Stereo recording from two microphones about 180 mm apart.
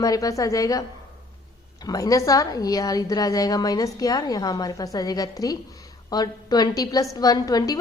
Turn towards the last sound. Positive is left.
turn(degrees=20)  # may be behind; listen again after turning